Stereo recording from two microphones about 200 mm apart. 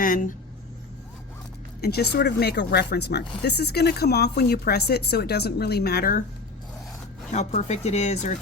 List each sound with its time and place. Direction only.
0.0 s speech: 40° left (ahead or behind)
1.8 s speech: 55° left (ahead or behind)
7.3 s speech: 35° left (ahead or behind)